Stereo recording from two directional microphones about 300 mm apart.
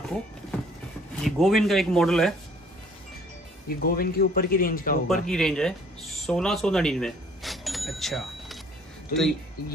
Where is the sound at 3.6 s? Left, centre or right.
Left.